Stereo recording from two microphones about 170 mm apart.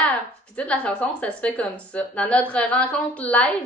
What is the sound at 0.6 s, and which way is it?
A woman's voice, 5° left (ahead or behind).